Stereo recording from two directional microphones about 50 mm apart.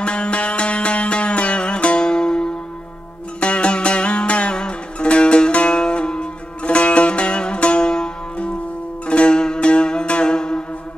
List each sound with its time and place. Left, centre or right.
0.0 s music: left